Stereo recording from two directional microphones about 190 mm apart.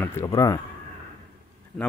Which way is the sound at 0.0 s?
15° left (ahead or behind).